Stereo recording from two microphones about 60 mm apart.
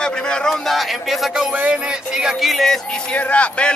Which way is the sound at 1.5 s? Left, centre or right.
Right.